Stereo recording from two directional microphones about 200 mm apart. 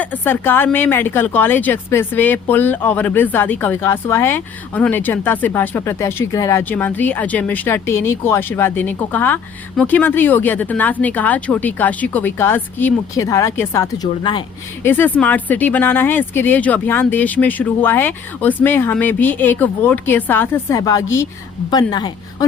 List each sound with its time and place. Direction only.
0.0 s a woman's voice: 10° left (ahead or behind)
14.8 s a woman's voice: 10° left (ahead or behind)